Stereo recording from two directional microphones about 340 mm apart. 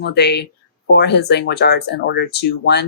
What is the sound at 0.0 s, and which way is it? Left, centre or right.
Speech, left.